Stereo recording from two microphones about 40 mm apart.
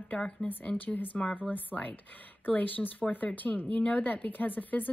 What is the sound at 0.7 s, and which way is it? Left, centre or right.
Speech, left.